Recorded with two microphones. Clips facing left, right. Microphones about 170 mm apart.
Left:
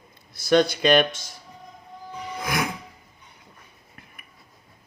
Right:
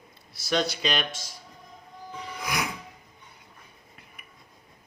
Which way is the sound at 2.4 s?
50° left (ahead or behind).